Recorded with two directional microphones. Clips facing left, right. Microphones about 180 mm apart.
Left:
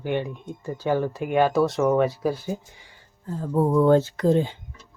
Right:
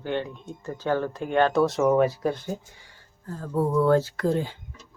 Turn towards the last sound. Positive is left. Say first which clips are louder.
# left 4 dB
turn(degrees=20)  # may be behind; listen again after turning